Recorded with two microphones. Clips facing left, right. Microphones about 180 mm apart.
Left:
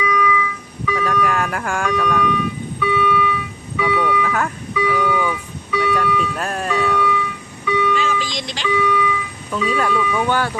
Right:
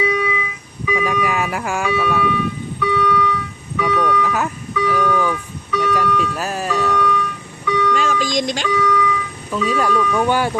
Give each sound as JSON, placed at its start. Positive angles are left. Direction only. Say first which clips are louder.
{"t": 0.0, "sound": "a sound", "louder": "left 1 dB", "side_deg": -25}
{"t": 4.7, "sound": "vehicle", "louder": "right 1 dB", "side_deg": 5}
{"t": 5.3, "sound": "organ", "louder": "right 1 dB", "side_deg": 5}
{"t": 6.1, "sound": "ice cream truck", "louder": "right 1 dB", "side_deg": 5}
{"t": 7.9, "sound": "music", "louder": "right 3 dB", "side_deg": -45}
{"t": 8.7, "sound": "vehicle", "louder": "left 1 dB", "side_deg": 5}
{"t": 9.5, "sound": "speech", "louder": "right 1 dB", "side_deg": 0}
{"t": 10.2, "sound": "speech", "louder": "right 2 dB", "side_deg": -15}